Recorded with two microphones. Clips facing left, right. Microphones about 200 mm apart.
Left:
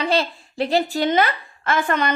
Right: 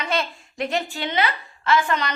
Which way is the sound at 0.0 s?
30° left (ahead or behind).